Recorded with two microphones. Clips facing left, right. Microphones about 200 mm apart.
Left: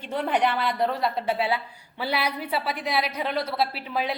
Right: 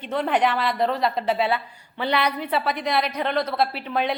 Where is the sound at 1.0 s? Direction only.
70° right (ahead or behind).